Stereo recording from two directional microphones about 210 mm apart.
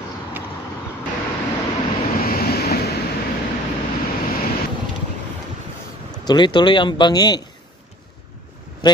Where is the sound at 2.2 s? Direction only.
45° left (ahead or behind).